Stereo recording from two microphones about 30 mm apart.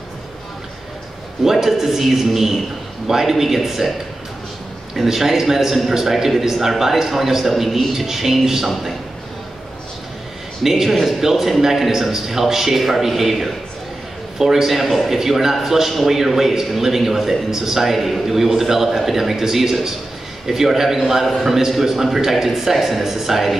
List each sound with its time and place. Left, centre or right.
1.4 s a man's voice: centre
4.9 s a man's voice: centre
10.6 s a man's voice: centre
14.7 s a man's voice: centre